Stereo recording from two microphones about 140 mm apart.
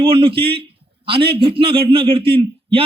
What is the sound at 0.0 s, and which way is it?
A man's voice, 40° right (ahead or behind).